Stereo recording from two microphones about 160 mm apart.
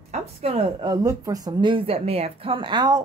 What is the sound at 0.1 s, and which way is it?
A woman's voice, 40° right (ahead or behind).